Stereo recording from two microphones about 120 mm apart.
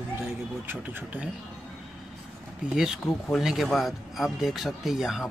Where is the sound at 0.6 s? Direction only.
15° right (ahead or behind).